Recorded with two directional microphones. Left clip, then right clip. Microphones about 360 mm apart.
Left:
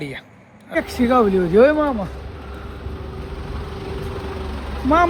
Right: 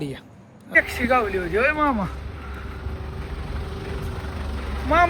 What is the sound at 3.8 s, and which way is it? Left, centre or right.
Vehicle, centre.